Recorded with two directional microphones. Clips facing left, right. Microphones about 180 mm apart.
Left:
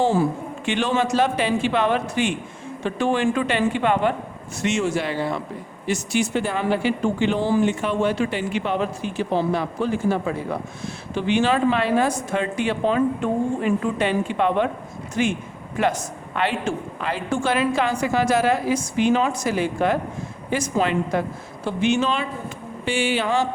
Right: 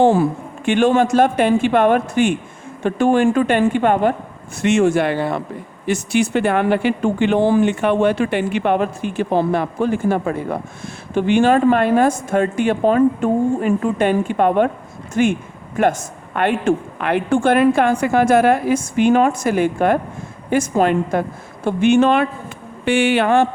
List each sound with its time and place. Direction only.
0.0 s a woman's voice: 60° right (ahead or behind)